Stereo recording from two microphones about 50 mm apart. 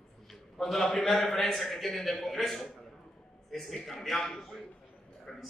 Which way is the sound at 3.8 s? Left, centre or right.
Centre.